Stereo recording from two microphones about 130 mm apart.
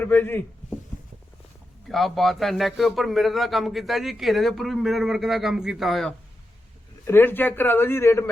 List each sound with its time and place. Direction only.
0.0 s a man's voice: 15° left (ahead or behind)
1.9 s a man's voice: centre (ahead or behind)
7.1 s a man's voice: 15° left (ahead or behind)